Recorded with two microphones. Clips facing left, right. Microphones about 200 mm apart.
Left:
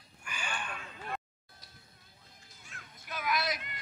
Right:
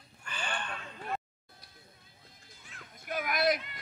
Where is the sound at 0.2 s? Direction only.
10° left (ahead or behind).